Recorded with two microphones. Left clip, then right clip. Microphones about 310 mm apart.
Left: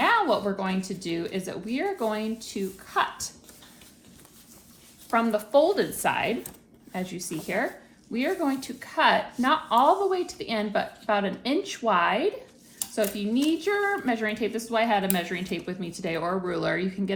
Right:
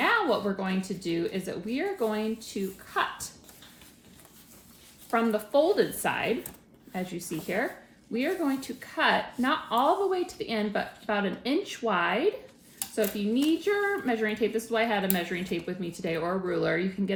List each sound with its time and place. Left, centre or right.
0.0 s a sound: centre
0.9 s a woman's voice: centre
5.1 s a woman's voice: centre